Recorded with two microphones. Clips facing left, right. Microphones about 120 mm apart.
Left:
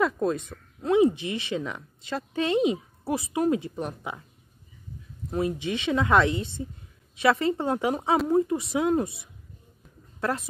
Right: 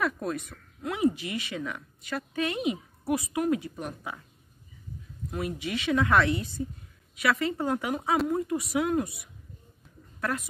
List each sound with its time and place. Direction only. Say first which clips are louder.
0.0 s speech: left 5 dB; 25° left (ahead or behind)
5.3 s speech: left 5 dB; 25° left (ahead or behind)